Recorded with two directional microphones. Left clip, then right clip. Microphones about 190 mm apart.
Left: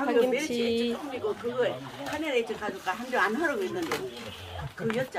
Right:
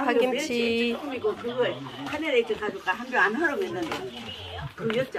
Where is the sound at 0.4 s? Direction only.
Centre (ahead or behind).